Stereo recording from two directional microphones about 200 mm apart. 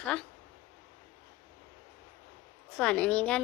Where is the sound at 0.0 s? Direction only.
5° left (ahead or behind).